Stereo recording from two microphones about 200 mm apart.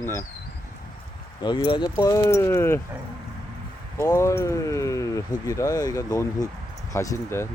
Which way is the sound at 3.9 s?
15° left (ahead or behind).